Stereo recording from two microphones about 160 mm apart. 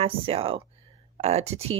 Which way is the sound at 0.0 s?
35° right (ahead or behind).